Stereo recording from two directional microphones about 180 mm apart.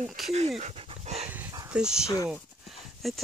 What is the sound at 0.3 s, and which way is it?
Dog, 35° right (ahead or behind).